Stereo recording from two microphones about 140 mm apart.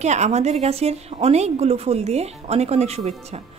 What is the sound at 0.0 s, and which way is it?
A woman's voice, 55° right (ahead or behind).